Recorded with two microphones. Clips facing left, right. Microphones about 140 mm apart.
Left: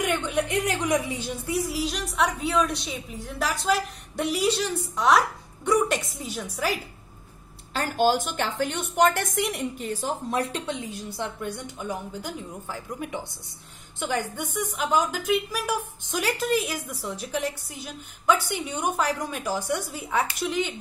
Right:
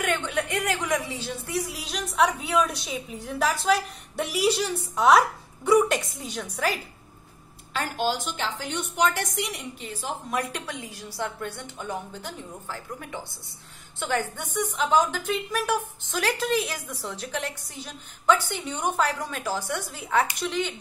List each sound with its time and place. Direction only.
0.0 s a woman's voice: 15° left (ahead or behind)
1.8 s a woman's voice: centre (ahead or behind)
7.7 s a woman's voice: 40° left (ahead or behind); by 20.8 s 10° left (ahead or behind)